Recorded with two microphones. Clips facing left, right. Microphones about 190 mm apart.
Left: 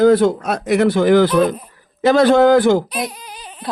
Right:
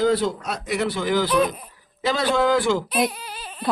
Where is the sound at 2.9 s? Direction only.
5° right (ahead or behind).